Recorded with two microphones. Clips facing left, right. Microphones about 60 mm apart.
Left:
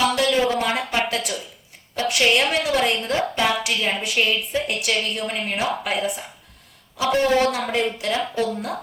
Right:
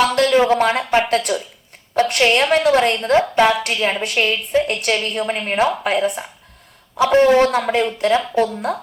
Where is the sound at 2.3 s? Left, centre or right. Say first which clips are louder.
Right 6 dB; right.